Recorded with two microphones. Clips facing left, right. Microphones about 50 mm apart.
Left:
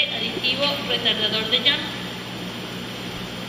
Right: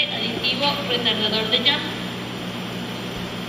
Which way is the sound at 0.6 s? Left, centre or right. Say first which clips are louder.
Right 2 dB; centre.